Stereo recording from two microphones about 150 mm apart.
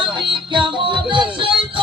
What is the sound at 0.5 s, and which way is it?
Music, 30° right (ahead or behind).